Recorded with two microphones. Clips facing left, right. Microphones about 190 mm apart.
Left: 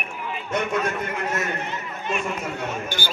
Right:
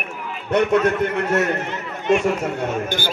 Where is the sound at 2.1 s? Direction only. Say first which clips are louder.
Right 10 dB; 85° right.